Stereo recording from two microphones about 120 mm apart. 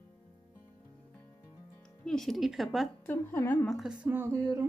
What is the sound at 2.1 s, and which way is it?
Speech, 5° left (ahead or behind).